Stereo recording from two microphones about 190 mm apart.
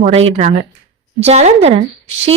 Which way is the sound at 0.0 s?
30° right (ahead or behind).